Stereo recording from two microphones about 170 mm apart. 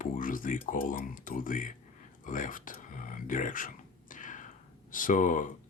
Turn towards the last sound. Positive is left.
turn(degrees=50)  # may be behind; listen again after turning